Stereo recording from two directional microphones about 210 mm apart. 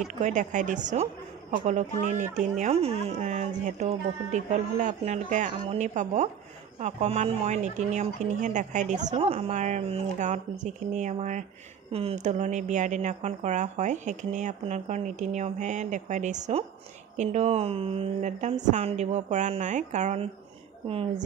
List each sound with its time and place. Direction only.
0.1 s a woman's voice: 35° right (ahead or behind)